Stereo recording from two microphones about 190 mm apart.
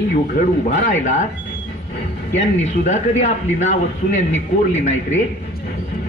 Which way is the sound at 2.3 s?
35° left (ahead or behind).